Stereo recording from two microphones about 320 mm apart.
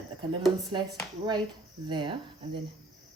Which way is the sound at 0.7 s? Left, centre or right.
Centre.